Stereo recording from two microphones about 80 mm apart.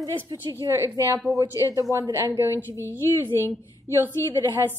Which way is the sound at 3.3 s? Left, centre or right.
Left.